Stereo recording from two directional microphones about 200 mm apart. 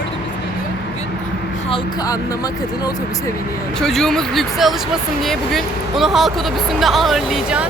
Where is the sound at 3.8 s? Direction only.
Centre (ahead or behind).